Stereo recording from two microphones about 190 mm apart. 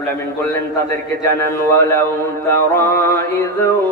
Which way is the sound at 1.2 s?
15° left (ahead or behind).